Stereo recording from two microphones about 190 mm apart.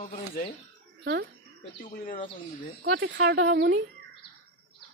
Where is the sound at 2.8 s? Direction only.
65° right (ahead or behind).